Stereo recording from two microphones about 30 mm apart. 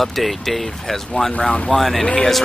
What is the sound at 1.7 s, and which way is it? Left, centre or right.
Speech, centre.